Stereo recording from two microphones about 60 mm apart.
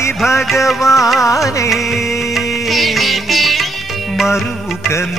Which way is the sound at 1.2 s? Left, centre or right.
Left.